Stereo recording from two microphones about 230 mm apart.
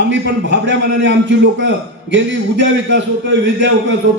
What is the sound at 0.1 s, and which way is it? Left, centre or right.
A man's voice, right.